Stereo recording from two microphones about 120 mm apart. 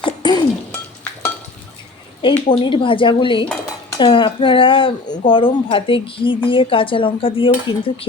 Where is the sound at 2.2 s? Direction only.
50° left (ahead or behind).